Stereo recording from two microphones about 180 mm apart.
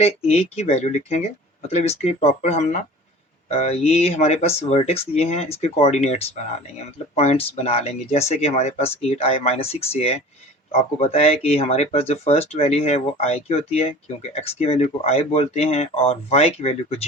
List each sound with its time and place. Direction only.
0.0 s speech: 35° left (ahead or behind)